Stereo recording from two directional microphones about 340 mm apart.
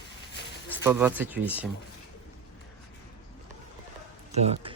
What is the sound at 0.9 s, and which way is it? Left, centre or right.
Speech, centre.